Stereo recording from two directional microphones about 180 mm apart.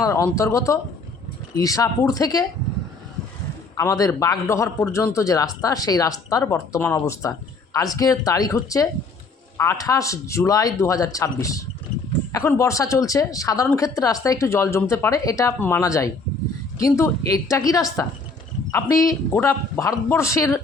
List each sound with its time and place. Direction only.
0.0 s a man's voice: 15° left (ahead or behind)
3.8 s a man's voice: 20° left (ahead or behind)